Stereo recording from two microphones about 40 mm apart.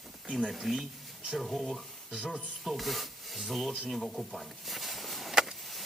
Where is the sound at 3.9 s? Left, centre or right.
Centre.